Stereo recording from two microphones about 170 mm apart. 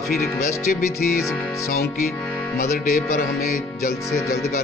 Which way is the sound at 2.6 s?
55° left (ahead or behind).